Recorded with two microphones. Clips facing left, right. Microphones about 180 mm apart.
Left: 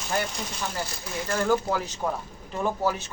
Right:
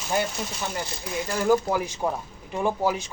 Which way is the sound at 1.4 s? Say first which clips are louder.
Right 3 dB; 10° right (ahead or behind).